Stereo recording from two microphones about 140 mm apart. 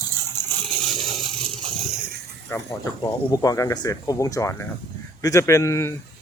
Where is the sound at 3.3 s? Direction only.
25° left (ahead or behind).